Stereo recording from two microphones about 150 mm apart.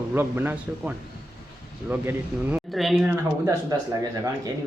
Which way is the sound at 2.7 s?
Centre (ahead or behind).